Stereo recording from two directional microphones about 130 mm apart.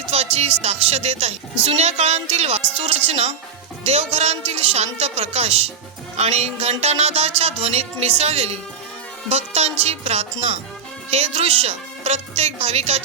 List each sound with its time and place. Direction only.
0.1 s music: 50° right (ahead or behind)
0.6 s speech: 55° right (ahead or behind)